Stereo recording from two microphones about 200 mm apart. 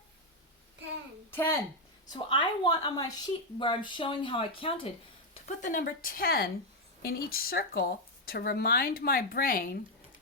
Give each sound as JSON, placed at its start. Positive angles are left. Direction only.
{"t": 1.3, "sound": "speech", "side_deg": 10}
{"t": 2.1, "sound": "a woman's voice", "side_deg": 25}